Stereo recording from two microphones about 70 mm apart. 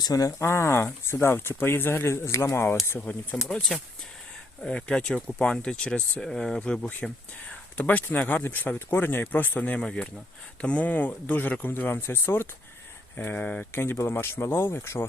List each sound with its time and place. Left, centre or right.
0.0 s speech: left
0.4 s speech: left
3.3 s speech: centre
4.6 s speech: centre
6.6 s speech: left
13.7 s speech: left